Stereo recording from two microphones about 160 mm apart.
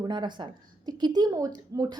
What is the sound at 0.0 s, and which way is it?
A woman's voice, 30° right (ahead or behind).